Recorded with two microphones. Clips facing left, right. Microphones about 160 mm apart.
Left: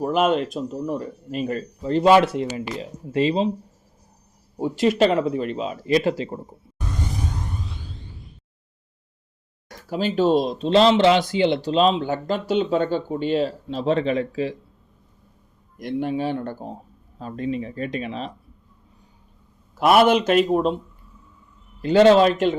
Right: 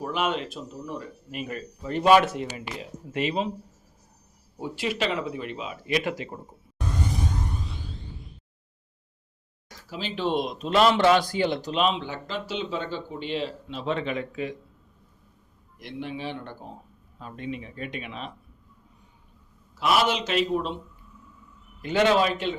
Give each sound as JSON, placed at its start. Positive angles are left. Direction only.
{"t": 0.0, "sound": "speech", "side_deg": 40}
{"t": 4.8, "sound": "speech", "side_deg": 45}
{"t": 9.6, "sound": "speech", "side_deg": 50}
{"t": 15.8, "sound": "a man's voice", "side_deg": 45}
{"t": 19.7, "sound": "a man's voice", "side_deg": 55}
{"t": 21.8, "sound": "speech", "side_deg": 35}